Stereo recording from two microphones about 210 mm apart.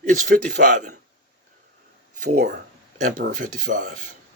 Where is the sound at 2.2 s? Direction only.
35° right (ahead or behind).